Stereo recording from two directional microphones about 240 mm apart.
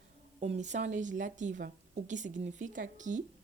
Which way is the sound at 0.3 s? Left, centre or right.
Right.